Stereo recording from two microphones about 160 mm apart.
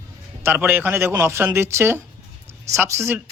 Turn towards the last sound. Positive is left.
turn(degrees=-15)  # may be behind; listen again after turning